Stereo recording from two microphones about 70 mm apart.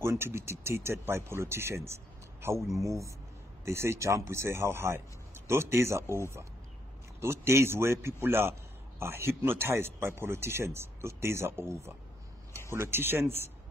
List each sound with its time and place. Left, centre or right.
0.0 s speech: right
3.6 s speech: right